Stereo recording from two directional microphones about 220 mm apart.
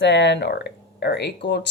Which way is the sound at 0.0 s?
55° left (ahead or behind).